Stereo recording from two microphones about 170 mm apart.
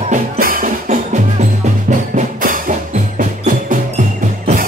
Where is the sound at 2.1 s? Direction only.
50° right (ahead or behind).